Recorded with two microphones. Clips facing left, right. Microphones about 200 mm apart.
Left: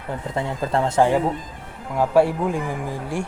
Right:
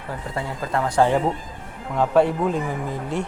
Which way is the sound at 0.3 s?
25° left (ahead or behind).